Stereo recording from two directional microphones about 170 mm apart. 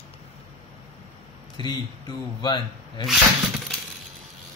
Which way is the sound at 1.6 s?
25° left (ahead or behind).